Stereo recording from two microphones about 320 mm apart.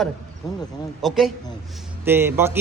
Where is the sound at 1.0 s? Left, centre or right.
Centre.